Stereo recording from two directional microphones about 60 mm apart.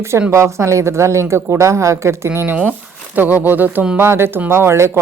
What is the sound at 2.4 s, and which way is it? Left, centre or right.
Speech, right.